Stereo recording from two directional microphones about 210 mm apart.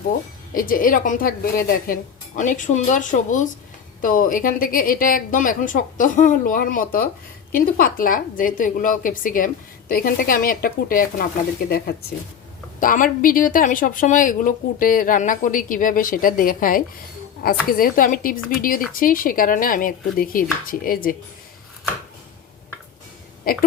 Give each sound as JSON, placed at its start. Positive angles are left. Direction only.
{"t": 0.5, "sound": "a woman's voice", "side_deg": 40}
{"t": 23.5, "sound": "speech", "side_deg": 45}